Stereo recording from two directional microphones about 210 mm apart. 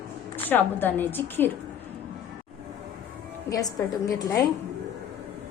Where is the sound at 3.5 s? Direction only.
15° left (ahead or behind).